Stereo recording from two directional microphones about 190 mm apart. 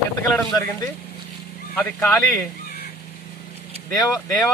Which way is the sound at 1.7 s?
10° left (ahead or behind).